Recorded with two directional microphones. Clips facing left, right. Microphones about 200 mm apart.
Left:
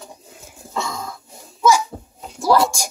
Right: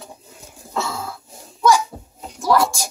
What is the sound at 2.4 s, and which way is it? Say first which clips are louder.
Speech: left 1 dB; 30° left (ahead or behind).